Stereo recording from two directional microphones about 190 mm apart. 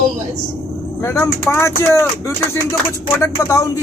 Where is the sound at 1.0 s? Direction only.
15° left (ahead or behind).